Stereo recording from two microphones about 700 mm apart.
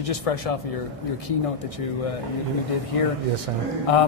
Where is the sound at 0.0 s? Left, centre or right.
Left.